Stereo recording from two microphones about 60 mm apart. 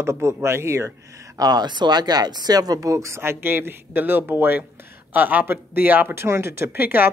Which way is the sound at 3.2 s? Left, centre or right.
Right.